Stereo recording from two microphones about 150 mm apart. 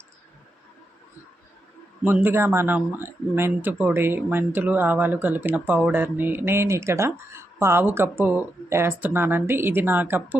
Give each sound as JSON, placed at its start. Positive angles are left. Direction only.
{"t": 2.0, "sound": "speech", "side_deg": -15}